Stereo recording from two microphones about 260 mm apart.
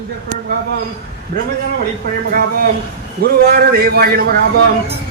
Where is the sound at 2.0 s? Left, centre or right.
Right.